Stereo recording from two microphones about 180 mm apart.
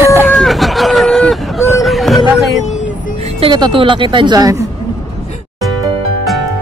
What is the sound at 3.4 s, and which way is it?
Speech, 25° right (ahead or behind).